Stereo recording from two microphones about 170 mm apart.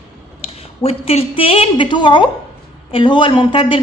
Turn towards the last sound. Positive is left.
turn(degrees=30)  # may be behind; listen again after turning